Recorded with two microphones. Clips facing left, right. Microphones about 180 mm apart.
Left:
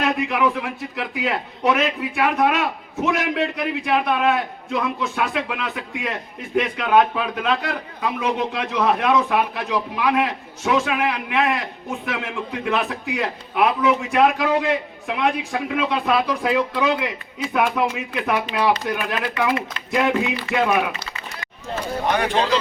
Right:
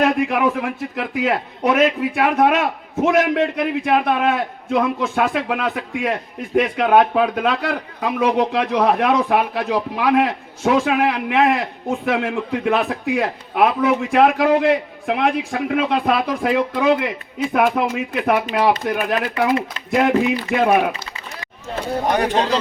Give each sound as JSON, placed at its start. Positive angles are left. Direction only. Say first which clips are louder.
{"t": 0.0, "sound": "a man's voice", "louder": "right 3 dB", "side_deg": -50}
{"t": 22.0, "sound": "speech", "louder": "right 2 dB", "side_deg": -40}